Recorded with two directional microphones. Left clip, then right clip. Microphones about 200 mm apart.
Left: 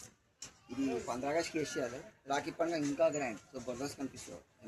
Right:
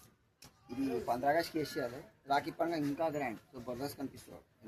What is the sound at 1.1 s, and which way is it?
Speech, 10° right (ahead or behind).